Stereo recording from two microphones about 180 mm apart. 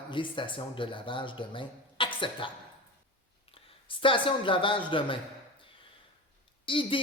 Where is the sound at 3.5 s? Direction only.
30° left (ahead or behind).